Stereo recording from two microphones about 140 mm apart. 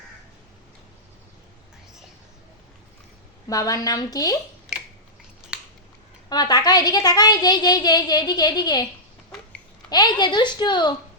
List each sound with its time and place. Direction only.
3.5 s a woman's voice: 25° left (ahead or behind)
6.2 s a woman's voice: 30° left (ahead or behind)
9.9 s speech: 30° left (ahead or behind)